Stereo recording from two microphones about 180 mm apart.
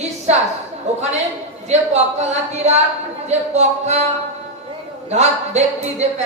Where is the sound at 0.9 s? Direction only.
40° right (ahead or behind).